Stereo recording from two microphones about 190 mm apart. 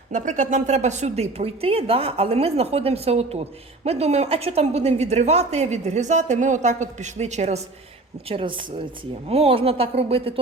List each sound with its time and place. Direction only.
0.1 s a woman's voice: 40° right (ahead or behind)